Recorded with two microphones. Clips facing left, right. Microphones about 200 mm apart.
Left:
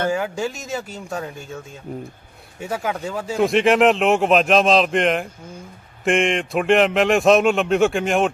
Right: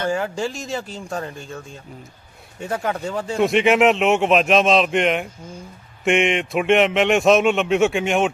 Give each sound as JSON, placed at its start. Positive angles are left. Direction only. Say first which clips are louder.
{"t": 0.1, "sound": "speech", "louder": "even", "side_deg": 5}
{"t": 1.9, "sound": "speech", "louder": "left 9 dB", "side_deg": 45}
{"t": 2.6, "sound": "speech", "louder": "right 1 dB", "side_deg": 5}